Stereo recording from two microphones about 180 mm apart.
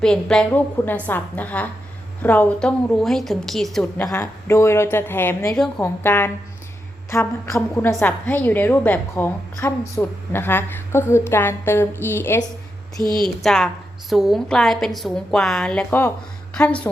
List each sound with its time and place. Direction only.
0.0 s a woman's voice: 5° left (ahead or behind)
4.1 s a woman's voice: 15° left (ahead or behind)